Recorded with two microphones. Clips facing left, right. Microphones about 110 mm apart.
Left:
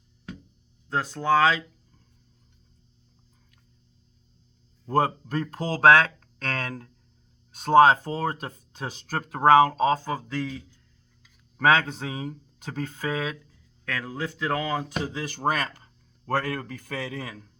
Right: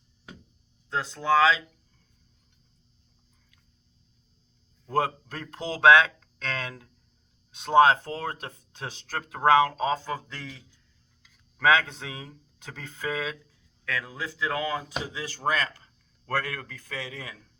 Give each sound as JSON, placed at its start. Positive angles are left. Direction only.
{"t": 0.9, "sound": "speech", "side_deg": 40}
{"t": 4.9, "sound": "speech", "side_deg": 45}
{"t": 11.5, "sound": "speech", "side_deg": 45}